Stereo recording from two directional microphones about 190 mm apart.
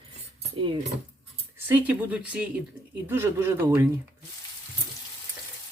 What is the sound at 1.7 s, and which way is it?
Speech, 10° right (ahead or behind).